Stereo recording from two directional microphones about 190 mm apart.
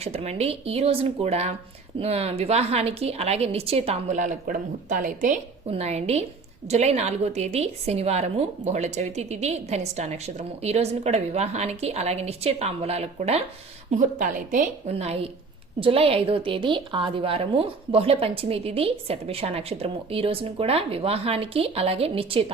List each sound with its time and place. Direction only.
0.0 s a woman's voice: 35° right (ahead or behind)